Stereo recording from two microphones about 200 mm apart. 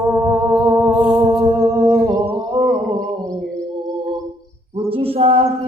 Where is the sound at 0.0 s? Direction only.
15° right (ahead or behind).